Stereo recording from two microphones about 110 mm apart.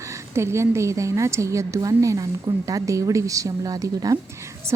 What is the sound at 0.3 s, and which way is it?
A woman's voice, 25° right (ahead or behind).